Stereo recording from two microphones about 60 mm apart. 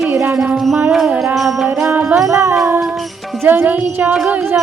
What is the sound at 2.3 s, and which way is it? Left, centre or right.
Music, right.